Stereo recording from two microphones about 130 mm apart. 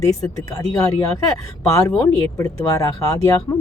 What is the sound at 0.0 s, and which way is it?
Speech, 25° left (ahead or behind).